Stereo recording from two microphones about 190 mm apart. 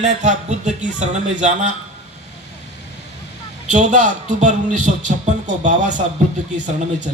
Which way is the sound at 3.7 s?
40° right (ahead or behind).